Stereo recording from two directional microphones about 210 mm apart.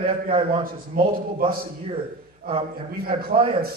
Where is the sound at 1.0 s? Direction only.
40° right (ahead or behind).